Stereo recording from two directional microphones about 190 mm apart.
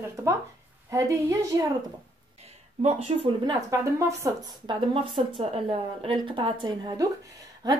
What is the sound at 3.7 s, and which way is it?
A woman's voice, 15° right (ahead or behind).